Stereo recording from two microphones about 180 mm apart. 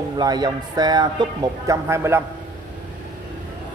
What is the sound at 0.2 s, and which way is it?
Speech, 20° right (ahead or behind).